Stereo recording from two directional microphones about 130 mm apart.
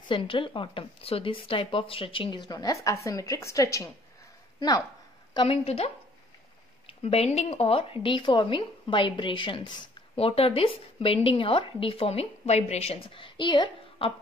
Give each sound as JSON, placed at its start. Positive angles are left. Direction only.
{"t": 0.1, "sound": "a woman's voice", "side_deg": 40}
{"t": 7.0, "sound": "speech", "side_deg": 50}